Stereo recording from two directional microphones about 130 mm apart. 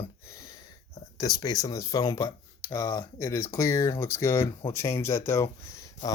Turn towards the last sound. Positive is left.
turn(degrees=25)  # may be behind; listen again after turning